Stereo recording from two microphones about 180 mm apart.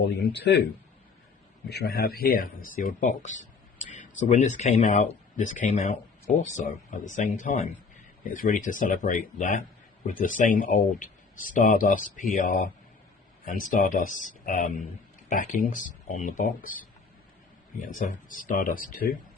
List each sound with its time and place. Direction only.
0.0 s speech: 70° left (ahead or behind)
1.7 s speech: 60° left (ahead or behind)